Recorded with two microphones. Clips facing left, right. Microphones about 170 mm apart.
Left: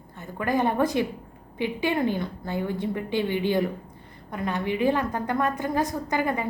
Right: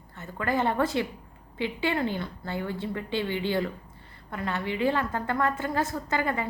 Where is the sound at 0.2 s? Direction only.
15° left (ahead or behind).